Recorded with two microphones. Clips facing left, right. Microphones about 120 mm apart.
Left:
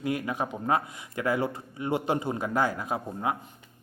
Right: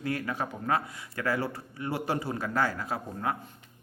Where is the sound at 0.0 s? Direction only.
15° left (ahead or behind).